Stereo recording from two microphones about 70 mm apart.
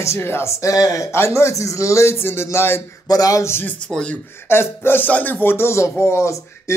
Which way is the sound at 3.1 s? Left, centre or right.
Left.